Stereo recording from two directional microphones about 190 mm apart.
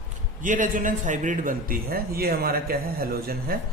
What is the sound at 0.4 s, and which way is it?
A man's voice, 45° right (ahead or behind).